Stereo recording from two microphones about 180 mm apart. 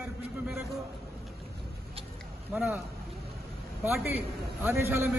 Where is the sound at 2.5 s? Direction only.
5° right (ahead or behind).